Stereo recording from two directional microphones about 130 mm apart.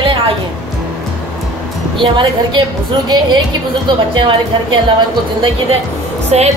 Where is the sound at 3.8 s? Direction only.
40° right (ahead or behind).